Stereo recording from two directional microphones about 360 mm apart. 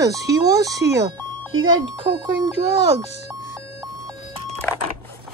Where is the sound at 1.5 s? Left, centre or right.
Right.